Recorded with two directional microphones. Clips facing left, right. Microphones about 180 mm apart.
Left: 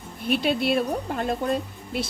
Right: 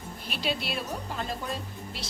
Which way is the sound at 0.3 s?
55° left (ahead or behind).